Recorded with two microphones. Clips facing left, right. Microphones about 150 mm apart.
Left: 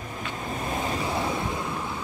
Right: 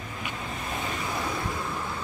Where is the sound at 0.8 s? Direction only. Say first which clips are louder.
Left 4 dB; 30° left (ahead or behind).